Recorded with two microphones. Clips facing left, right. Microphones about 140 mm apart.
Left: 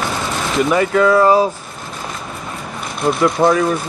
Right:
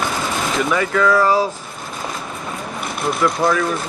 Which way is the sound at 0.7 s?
25° left (ahead or behind).